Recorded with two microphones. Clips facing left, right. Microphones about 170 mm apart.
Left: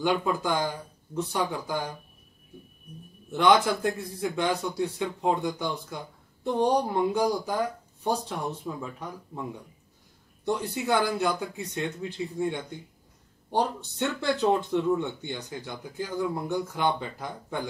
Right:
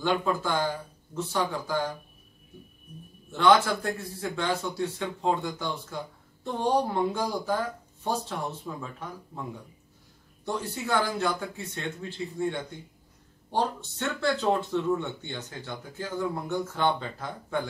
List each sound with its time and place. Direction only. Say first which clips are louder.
0.0 s speech: left 1 dB; 15° left (ahead or behind)
3.3 s speech: even; 15° left (ahead or behind)
10.4 s speech: left 4 dB; 15° left (ahead or behind)